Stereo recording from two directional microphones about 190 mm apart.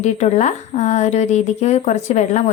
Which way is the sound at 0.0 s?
35° left (ahead or behind).